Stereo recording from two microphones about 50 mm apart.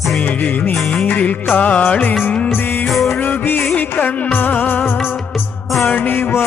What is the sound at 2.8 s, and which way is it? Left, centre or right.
Music, centre.